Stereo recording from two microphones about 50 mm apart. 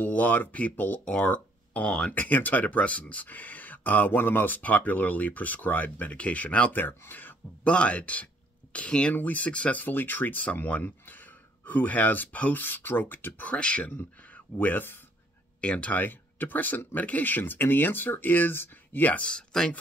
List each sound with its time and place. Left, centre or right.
0.0 s speech: left
1.0 s speech: centre
1.3 s a sound: left
1.9 s speech: centre
2.1 s speech: left
6.8 s speech: left
7.6 s speech: left
9.1 s speech: left
9.5 s speech: left
9.8 s speech: left
13.5 s speech: left
15.6 s speech: left
16.0 s speech: left
19.1 s speech: centre